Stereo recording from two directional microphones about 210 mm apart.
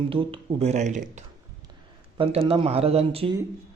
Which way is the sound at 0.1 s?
25° right (ahead or behind).